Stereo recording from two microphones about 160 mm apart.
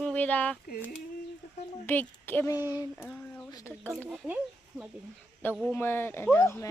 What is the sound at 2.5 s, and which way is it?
Speech, 15° right (ahead or behind).